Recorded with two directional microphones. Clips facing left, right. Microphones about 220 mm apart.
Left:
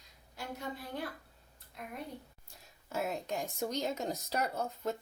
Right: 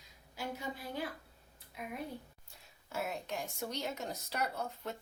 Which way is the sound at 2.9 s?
40° left (ahead or behind).